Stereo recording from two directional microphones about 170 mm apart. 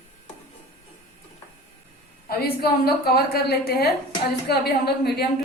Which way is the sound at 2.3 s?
65° left (ahead or behind).